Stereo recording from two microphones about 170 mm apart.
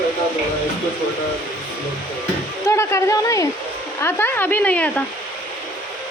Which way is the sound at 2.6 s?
15° left (ahead or behind).